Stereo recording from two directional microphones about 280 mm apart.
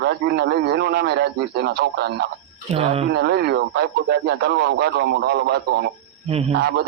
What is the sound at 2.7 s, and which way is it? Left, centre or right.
Speech, right.